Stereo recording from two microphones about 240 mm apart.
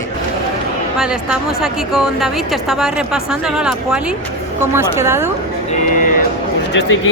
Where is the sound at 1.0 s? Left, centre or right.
Centre.